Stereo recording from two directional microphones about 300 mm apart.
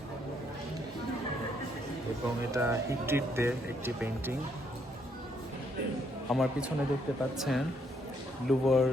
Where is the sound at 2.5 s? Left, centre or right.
Centre.